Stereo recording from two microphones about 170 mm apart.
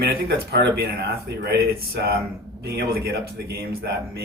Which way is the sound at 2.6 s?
65° right (ahead or behind).